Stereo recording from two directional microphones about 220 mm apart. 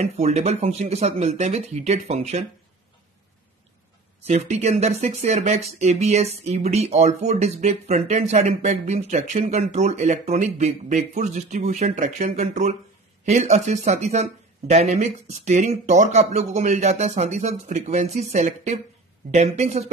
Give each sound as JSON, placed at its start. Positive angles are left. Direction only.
{"t": 0.0, "sound": "speech", "side_deg": -30}
{"t": 4.3, "sound": "speech", "side_deg": -30}